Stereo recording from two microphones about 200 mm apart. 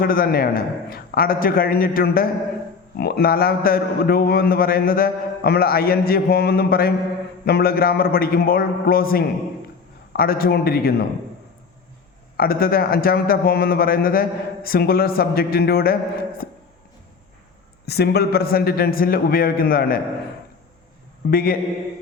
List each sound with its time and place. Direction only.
0.0 s a man's voice: 45° left (ahead or behind)
12.4 s a man's voice: 50° left (ahead or behind)
17.8 s a man's voice: 55° left (ahead or behind)
21.2 s a man's voice: 45° left (ahead or behind)